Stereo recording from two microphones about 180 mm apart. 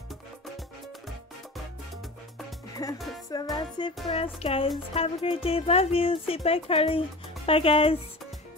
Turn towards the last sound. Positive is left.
turn(degrees=30)  # may be behind; listen again after turning